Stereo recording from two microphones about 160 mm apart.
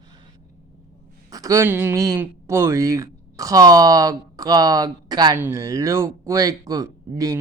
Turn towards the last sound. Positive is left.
turn(degrees=-20)  # may be behind; listen again after turning